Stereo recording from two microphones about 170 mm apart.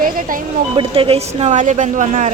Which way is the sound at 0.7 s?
30° right (ahead or behind).